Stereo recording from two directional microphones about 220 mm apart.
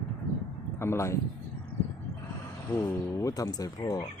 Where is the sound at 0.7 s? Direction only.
10° left (ahead or behind).